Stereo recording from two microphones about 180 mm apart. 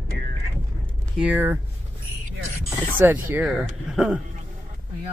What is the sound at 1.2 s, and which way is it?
Speech, 10° right (ahead or behind).